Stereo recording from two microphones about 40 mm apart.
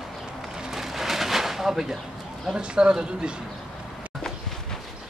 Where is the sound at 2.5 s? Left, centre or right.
Right.